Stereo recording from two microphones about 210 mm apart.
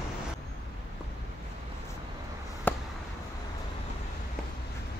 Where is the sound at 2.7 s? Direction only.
10° left (ahead or behind).